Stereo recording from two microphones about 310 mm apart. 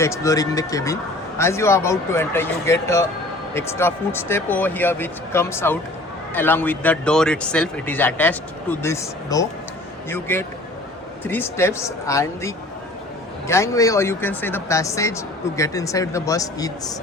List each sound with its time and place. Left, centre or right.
0.0 s speech: centre